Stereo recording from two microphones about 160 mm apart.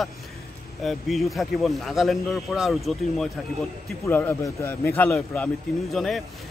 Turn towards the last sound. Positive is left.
turn(degrees=0)  # may be behind; listen again after turning